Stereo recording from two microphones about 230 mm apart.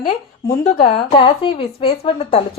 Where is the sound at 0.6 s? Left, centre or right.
Left.